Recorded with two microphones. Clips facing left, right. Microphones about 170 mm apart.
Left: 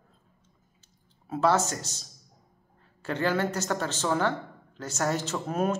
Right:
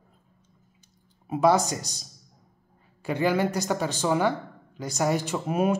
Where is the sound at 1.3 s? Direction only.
15° right (ahead or behind).